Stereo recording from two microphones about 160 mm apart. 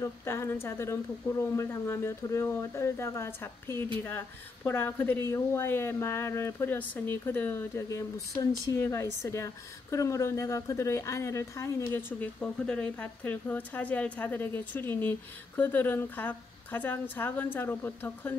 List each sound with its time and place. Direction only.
0.0 s a woman's voice: 15° left (ahead or behind)